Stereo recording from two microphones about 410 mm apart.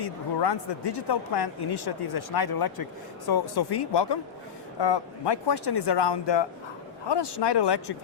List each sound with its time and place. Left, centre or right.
0.0 s speech: left
7.1 s speech: left